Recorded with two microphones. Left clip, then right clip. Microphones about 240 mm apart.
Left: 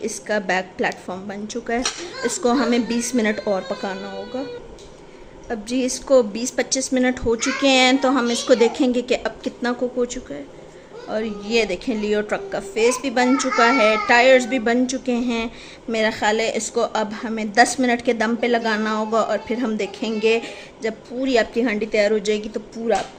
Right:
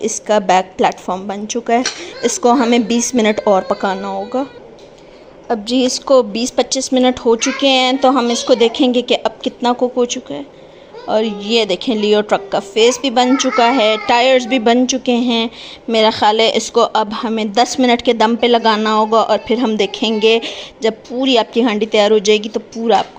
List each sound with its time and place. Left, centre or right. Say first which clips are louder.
0.0 s a woman's voice: right 9 dB; centre
5.5 s a woman's voice: right 8 dB; centre